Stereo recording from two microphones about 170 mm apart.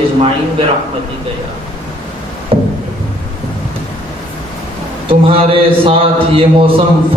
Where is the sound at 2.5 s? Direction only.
35° right (ahead or behind).